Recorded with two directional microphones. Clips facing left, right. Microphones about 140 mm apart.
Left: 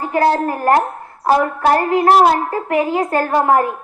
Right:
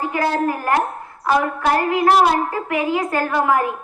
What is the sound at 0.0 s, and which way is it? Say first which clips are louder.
A child's voice: left 4 dB; 35° left (ahead or behind).